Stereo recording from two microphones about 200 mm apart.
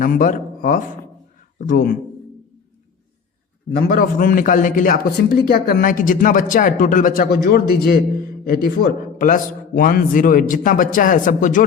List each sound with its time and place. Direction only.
0.0 s a man's voice: 45° left (ahead or behind)
3.8 s a man's voice: 45° left (ahead or behind)